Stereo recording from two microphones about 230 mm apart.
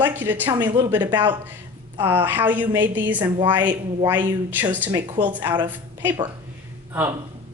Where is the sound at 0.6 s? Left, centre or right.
Centre.